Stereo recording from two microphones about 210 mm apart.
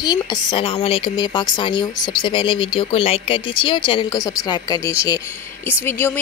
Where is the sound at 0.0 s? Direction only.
20° left (ahead or behind).